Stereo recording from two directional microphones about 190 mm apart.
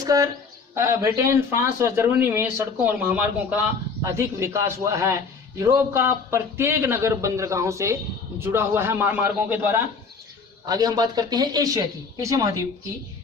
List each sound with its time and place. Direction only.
0.0 s a man's voice: 20° right (ahead or behind)